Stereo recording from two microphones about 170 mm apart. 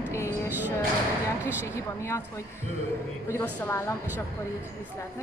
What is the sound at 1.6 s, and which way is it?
Speech, 15° left (ahead or behind).